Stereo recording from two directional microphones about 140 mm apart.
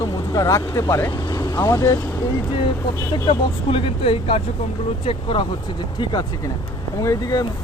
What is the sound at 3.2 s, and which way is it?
Speech, 40° left (ahead or behind).